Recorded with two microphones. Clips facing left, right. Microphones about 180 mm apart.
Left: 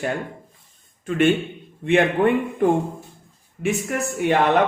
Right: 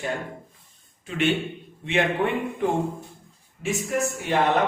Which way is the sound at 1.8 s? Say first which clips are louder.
Left 6 dB; 50° left (ahead or behind).